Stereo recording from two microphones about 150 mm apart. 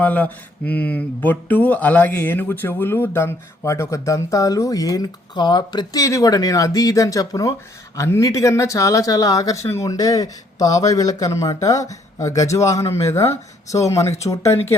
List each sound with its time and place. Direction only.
0.0 s speech: 10° left (ahead or behind)